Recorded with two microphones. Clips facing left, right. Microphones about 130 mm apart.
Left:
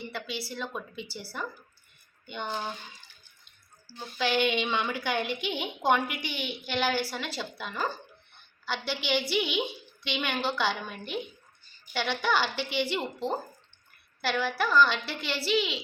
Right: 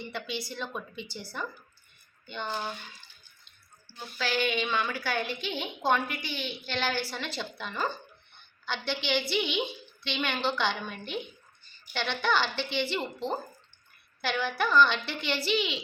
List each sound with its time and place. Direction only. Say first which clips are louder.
0.0 s a woman's voice: even; centre (ahead or behind)
4.2 s a woman's voice: left 3 dB; 20° left (ahead or behind); by 15.8 s centre (ahead or behind)